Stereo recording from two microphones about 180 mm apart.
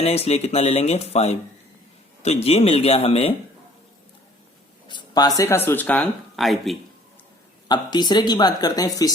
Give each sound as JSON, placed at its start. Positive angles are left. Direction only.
{"t": 0.0, "sound": "speech", "side_deg": 35}
{"t": 4.9, "sound": "a sound", "side_deg": 25}
{"t": 5.4, "sound": "speech", "side_deg": 15}
{"t": 7.7, "sound": "speech", "side_deg": 25}